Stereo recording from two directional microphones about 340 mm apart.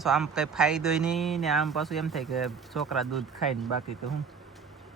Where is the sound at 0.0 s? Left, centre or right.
Centre.